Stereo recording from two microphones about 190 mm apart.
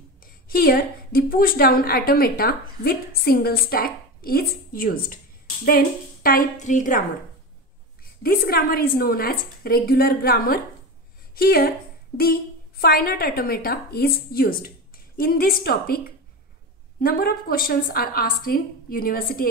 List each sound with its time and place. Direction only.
0.5 s a woman's voice: 50° left (ahead or behind)
8.2 s a woman's voice: 50° left (ahead or behind)
12.8 s a woman's voice: 50° left (ahead or behind)